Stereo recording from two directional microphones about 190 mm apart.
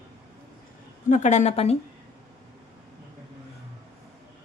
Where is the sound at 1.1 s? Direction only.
40° left (ahead or behind).